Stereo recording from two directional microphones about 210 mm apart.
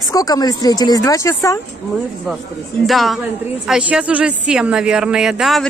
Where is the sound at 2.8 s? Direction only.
Centre (ahead or behind).